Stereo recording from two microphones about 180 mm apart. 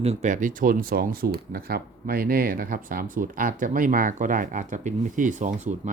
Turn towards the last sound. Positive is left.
turn(degrees=-45)  # may be behind; listen again after turning